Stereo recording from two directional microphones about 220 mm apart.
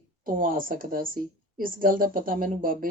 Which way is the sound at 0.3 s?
40° right (ahead or behind).